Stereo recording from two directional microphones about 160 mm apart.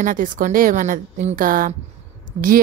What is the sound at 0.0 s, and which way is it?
A woman's voice, 55° right (ahead or behind).